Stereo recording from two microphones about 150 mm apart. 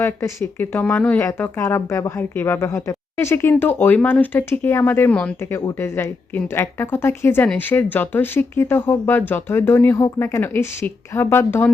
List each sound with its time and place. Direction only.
0.0 s a woman's voice: 15° left (ahead or behind)